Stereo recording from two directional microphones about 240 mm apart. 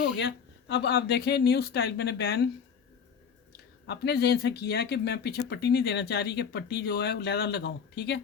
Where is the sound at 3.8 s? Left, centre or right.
Left.